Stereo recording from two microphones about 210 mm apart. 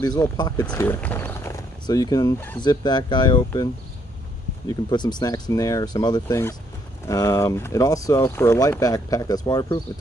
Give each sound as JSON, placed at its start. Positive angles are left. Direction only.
{"t": 0.0, "sound": "speech", "side_deg": 20}
{"t": 0.7, "sound": "speech", "side_deg": 10}
{"t": 4.6, "sound": "speech", "side_deg": 20}